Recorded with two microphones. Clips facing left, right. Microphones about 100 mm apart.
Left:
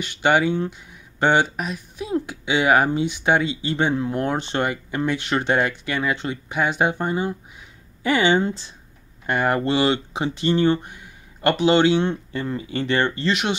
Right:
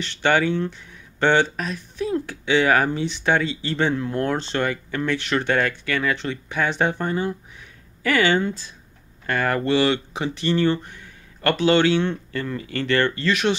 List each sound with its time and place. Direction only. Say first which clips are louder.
0.0 s speech: left 1 dB; 15° left (ahead or behind)